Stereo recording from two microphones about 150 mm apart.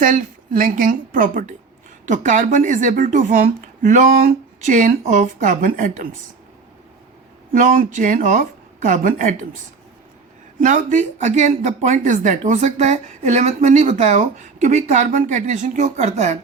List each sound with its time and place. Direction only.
0.0 s a woman's voice: 65° right (ahead or behind)
7.5 s a woman's voice: 65° right (ahead or behind)
10.6 s speech: 60° right (ahead or behind)